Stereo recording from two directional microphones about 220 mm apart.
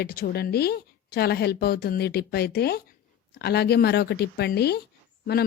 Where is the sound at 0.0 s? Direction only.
45° left (ahead or behind).